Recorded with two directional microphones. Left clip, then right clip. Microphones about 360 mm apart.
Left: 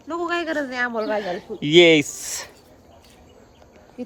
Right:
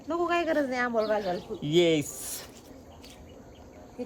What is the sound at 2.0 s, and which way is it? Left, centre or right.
Speech, centre.